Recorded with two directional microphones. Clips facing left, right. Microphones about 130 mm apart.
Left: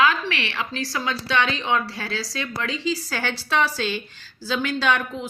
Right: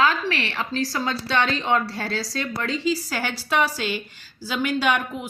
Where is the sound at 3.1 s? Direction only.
10° right (ahead or behind).